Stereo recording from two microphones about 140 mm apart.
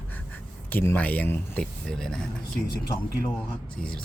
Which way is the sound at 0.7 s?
15° left (ahead or behind).